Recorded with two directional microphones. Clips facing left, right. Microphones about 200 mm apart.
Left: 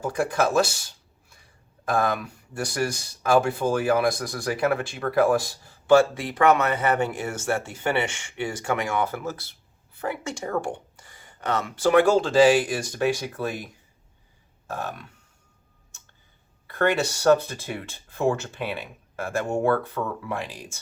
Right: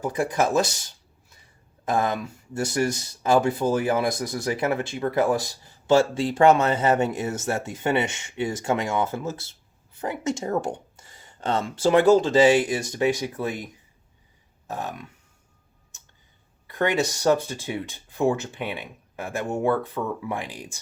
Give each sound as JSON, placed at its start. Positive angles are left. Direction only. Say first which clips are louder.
{"t": 0.0, "sound": "speech", "louder": "even", "side_deg": -20}
{"t": 14.7, "sound": "speech", "louder": "even", "side_deg": -20}
{"t": 16.7, "sound": "speech", "louder": "even", "side_deg": -15}